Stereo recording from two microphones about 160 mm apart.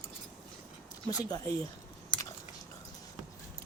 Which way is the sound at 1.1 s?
25° left (ahead or behind).